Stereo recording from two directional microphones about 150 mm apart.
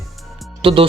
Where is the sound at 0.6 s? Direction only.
35° right (ahead or behind).